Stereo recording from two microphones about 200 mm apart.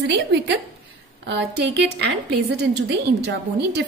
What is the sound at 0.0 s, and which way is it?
A woman's voice, 60° right (ahead or behind).